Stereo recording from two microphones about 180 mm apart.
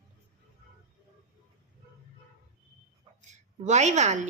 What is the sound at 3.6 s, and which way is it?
Speech, 40° right (ahead or behind).